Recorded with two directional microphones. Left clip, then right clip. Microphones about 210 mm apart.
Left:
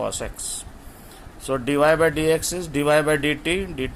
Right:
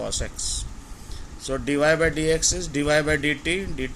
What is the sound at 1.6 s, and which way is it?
Speech, 15° right (ahead or behind).